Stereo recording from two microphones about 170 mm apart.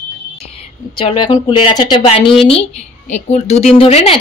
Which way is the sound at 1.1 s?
35° left (ahead or behind).